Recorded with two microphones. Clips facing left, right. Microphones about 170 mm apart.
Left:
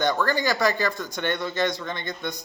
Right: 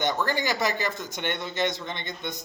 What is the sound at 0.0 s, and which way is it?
A man's voice, 20° right (ahead or behind).